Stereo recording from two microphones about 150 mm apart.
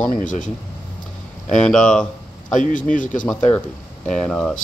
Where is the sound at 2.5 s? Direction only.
60° left (ahead or behind).